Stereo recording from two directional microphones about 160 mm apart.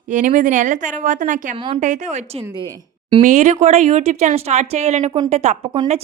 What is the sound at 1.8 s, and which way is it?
A woman's voice, 50° right (ahead or behind).